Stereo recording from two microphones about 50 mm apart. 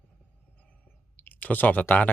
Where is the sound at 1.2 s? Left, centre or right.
Left.